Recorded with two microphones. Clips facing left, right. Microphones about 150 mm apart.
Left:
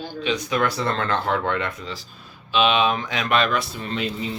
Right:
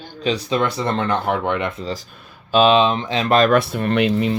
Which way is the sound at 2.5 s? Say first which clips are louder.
Right 5 dB; 35° right (ahead or behind).